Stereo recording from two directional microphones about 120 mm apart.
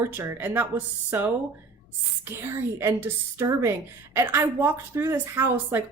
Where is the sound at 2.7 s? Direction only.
20° right (ahead or behind).